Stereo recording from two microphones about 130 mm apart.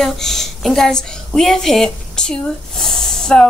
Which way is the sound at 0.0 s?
Centre (ahead or behind).